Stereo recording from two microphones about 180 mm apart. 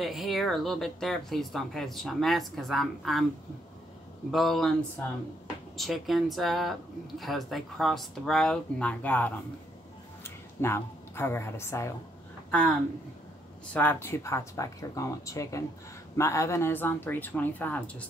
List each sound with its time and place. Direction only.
0.0 s speech: centre (ahead or behind)
4.3 s a woman's voice: centre (ahead or behind)
12.4 s speech: 5° left (ahead or behind)
13.7 s speech: 10° left (ahead or behind)